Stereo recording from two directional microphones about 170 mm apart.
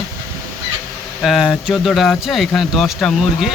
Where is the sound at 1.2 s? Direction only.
Centre (ahead or behind).